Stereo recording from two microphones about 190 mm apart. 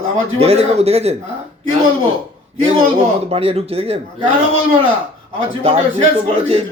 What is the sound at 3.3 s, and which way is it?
Speech, 30° right (ahead or behind).